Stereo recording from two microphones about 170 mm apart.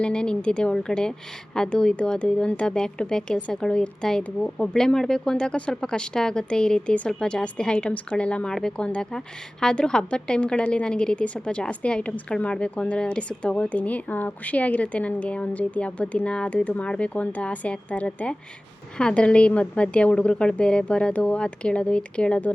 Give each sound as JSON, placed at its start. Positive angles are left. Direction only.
{"t": 0.0, "sound": "speech", "side_deg": 5}